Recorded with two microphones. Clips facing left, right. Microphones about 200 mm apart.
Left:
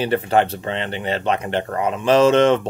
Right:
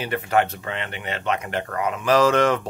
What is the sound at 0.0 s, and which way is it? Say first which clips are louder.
Speech: left 4 dB; 30° left (ahead or behind).